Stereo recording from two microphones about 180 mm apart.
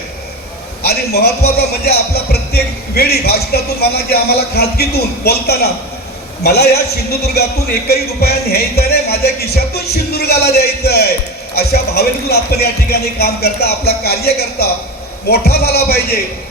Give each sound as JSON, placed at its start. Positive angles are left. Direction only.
{"t": 0.9, "sound": "a man's voice", "side_deg": 60}